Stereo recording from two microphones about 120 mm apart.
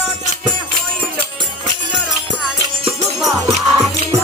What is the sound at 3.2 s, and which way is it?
Music, centre (ahead or behind).